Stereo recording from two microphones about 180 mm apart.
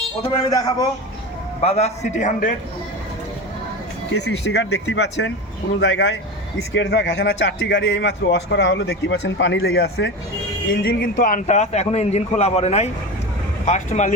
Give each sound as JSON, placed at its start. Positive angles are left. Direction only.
{"t": 0.3, "sound": "a man's voice", "side_deg": 20}
{"t": 1.6, "sound": "a man's voice", "side_deg": 35}
{"t": 4.1, "sound": "a man's voice", "side_deg": 70}